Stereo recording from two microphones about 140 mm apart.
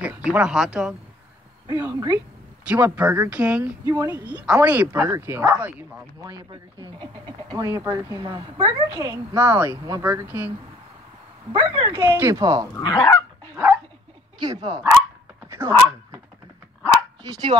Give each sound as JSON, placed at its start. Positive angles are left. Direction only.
{"t": 0.0, "sound": "speech", "side_deg": -10}
{"t": 1.8, "sound": "speech", "side_deg": -15}
{"t": 6.8, "sound": "speech", "side_deg": -30}
{"t": 7.6, "sound": "a woman's voice", "side_deg": -20}
{"t": 9.4, "sound": "speech", "side_deg": -15}
{"t": 11.5, "sound": "speech", "side_deg": -35}
{"t": 12.2, "sound": "a woman's voice", "side_deg": -25}
{"t": 12.7, "sound": "goose", "side_deg": 25}
{"t": 14.4, "sound": "a woman's voice", "side_deg": -30}
{"t": 15.4, "sound": "dog", "side_deg": -20}
{"t": 17.3, "sound": "a woman's voice", "side_deg": -30}